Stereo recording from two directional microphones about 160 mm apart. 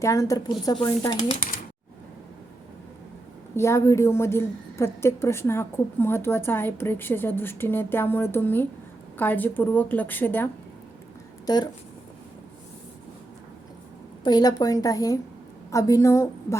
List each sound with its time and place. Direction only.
0.0 s a woman's voice: 20° left (ahead or behind)
3.5 s a woman's voice: 15° left (ahead or behind)
11.4 s speech: 25° left (ahead or behind)
14.3 s a woman's voice: 25° left (ahead or behind)